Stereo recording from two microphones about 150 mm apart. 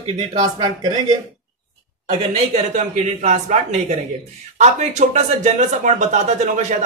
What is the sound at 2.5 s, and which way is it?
Speech, 55° right (ahead or behind).